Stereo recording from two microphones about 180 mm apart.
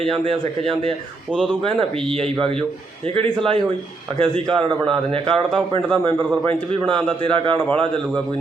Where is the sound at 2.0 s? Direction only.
30° right (ahead or behind).